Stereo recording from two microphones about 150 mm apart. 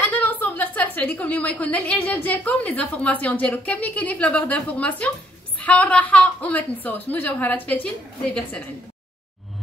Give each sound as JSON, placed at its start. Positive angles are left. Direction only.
{"t": 0.0, "sound": "a woman's voice", "side_deg": 15}